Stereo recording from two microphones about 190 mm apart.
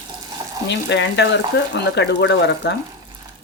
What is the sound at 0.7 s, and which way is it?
Speech, 65° left (ahead or behind).